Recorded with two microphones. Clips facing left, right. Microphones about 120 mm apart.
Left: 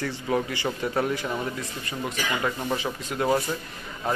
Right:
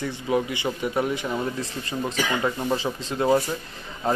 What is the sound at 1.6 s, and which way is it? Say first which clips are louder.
A man's voice: right 3 dB; 30° right (ahead or behind).